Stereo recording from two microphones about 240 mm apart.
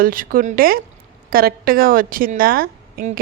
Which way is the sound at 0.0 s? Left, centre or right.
Right.